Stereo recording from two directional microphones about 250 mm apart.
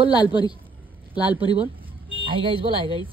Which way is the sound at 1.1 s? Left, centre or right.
Centre.